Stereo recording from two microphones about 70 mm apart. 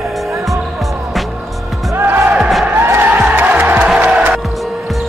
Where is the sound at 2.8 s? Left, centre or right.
Right.